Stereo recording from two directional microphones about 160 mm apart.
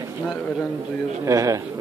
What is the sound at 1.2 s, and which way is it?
Speech, 20° right (ahead or behind).